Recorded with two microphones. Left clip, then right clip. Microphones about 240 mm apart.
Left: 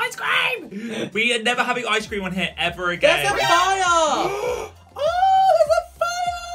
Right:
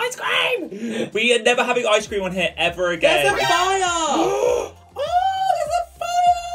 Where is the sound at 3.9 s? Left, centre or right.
Left.